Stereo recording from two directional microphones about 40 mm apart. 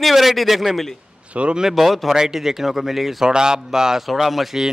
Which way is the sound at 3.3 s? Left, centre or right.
Centre.